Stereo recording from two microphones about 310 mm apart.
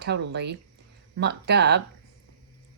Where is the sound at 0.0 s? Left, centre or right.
Right.